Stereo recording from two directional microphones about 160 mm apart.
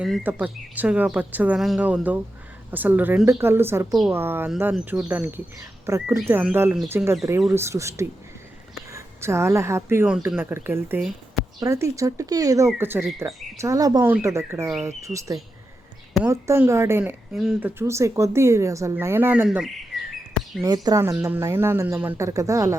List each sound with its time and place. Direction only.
0.2 s a woman's voice: 10° right (ahead or behind)
17.3 s speech: centre (ahead or behind)
17.7 s a woman's voice: 15° right (ahead or behind)
20.6 s speech: 25° right (ahead or behind)